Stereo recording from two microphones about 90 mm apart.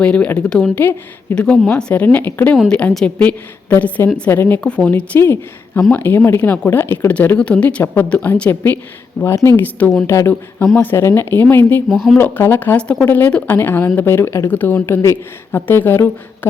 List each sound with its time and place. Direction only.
0.0 s a woman's voice: 15° left (ahead or behind)
0.8 s a woman's voice: 20° left (ahead or behind)
3.2 s speech: 15° left (ahead or behind)
7.1 s a woman's voice: 15° left (ahead or behind)
9.2 s a woman's voice: 30° left (ahead or behind)
9.6 s speech: 20° left (ahead or behind)